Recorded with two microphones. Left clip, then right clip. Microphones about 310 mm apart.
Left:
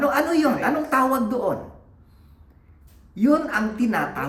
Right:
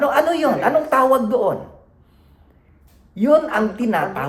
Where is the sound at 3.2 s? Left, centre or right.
Centre.